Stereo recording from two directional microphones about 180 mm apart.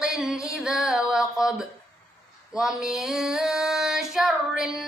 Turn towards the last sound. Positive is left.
turn(degrees=0)  # may be behind; listen again after turning